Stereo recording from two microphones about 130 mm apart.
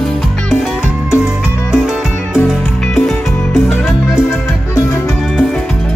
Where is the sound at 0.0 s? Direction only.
Centre (ahead or behind).